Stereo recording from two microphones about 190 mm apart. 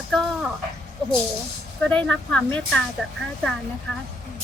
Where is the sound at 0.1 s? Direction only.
5° left (ahead or behind).